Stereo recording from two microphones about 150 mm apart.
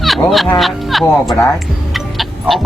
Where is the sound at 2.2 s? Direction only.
Centre (ahead or behind).